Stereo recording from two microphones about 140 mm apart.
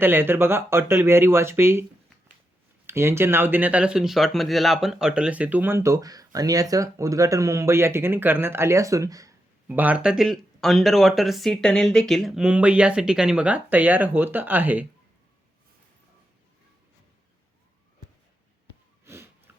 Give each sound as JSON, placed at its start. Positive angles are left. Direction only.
{"t": 0.0, "sound": "speech", "side_deg": -15}
{"t": 2.8, "sound": "speech", "side_deg": -20}
{"t": 9.6, "sound": "speech", "side_deg": -10}
{"t": 19.0, "sound": "snort", "side_deg": -20}